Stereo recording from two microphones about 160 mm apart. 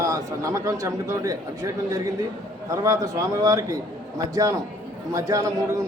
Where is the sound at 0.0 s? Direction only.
20° right (ahead or behind).